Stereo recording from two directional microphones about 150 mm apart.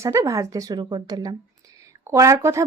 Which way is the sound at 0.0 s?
20° right (ahead or behind).